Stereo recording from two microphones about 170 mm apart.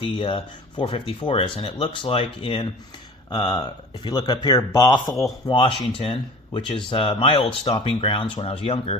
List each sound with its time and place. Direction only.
0.0 s speech: 30° left (ahead or behind)
5.5 s speech: 30° left (ahead or behind)